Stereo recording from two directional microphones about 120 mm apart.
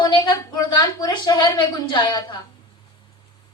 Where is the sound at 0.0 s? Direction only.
40° left (ahead or behind).